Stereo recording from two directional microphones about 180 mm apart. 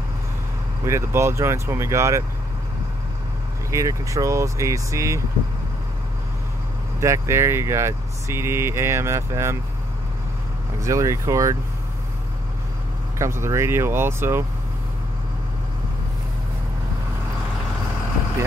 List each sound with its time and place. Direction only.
0.8 s speech: 15° right (ahead or behind)
3.7 s speech: 15° right (ahead or behind)
7.0 s speech: 15° right (ahead or behind)
10.8 s speech: 15° right (ahead or behind)
13.2 s speech: 15° right (ahead or behind)